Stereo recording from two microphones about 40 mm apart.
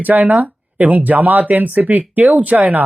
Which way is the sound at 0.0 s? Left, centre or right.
Right.